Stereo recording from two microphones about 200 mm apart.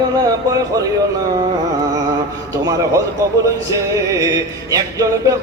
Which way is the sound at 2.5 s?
15° right (ahead or behind).